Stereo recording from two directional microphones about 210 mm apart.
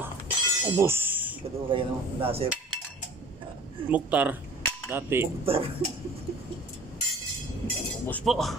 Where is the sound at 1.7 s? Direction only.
25° right (ahead or behind).